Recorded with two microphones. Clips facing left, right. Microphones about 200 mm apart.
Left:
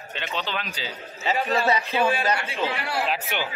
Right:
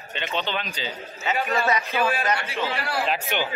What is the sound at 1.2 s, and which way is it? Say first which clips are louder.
A man's voice: left 1 dB; 35° left (ahead or behind).